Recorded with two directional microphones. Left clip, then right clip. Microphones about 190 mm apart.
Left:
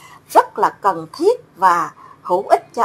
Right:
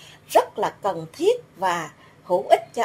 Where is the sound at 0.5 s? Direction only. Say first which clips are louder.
Left 8 dB; 5° left (ahead or behind).